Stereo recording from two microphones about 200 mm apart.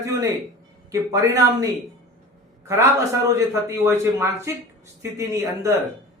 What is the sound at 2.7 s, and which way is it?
A man's voice, 15° right (ahead or behind).